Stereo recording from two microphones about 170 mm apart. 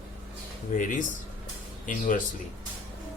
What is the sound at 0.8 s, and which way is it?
Speech, 50° left (ahead or behind).